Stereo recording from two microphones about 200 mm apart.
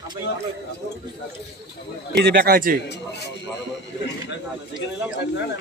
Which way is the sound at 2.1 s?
50° right (ahead or behind).